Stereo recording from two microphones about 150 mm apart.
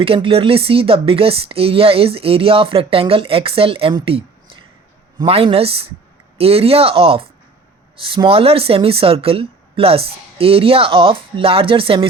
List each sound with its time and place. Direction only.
0.0 s speech: 40° right (ahead or behind)